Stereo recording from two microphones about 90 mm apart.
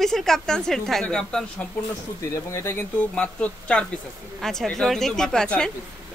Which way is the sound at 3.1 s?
15° left (ahead or behind).